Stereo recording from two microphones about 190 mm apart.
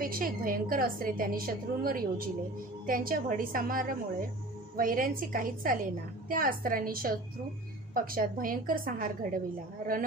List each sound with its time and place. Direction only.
0.0 s a woman's voice: 50° right (ahead or behind)